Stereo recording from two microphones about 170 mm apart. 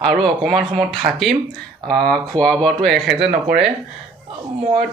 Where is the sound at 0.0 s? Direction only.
Centre (ahead or behind).